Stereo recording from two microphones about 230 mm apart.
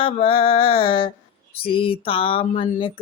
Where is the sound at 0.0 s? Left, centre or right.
Left.